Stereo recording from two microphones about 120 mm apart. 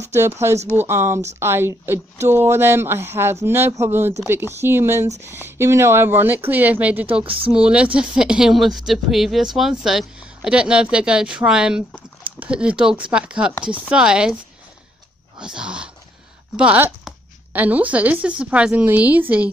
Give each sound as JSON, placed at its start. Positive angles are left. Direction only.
{"t": 0.0, "sound": "speech", "side_deg": -20}
{"t": 15.4, "sound": "speech", "side_deg": -5}